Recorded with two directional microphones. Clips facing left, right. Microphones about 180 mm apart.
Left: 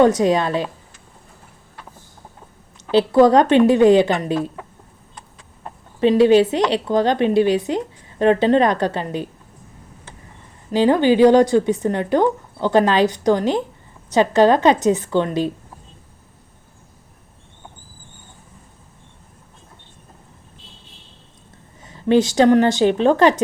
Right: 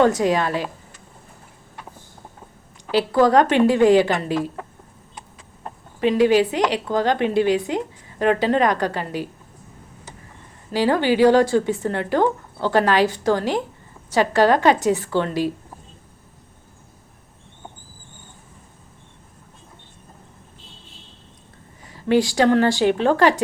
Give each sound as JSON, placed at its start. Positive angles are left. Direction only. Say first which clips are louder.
{"t": 0.0, "sound": "a woman's voice", "louder": "left 3 dB", "side_deg": 20}
{"t": 2.9, "sound": "a woman's voice", "louder": "left 3 dB", "side_deg": 20}
{"t": 6.0, "sound": "a woman's voice", "louder": "left 4 dB", "side_deg": 25}
{"t": 10.7, "sound": "a woman's voice", "louder": "left 4 dB", "side_deg": 20}
{"t": 21.8, "sound": "a woman's voice", "louder": "left 3 dB", "side_deg": 20}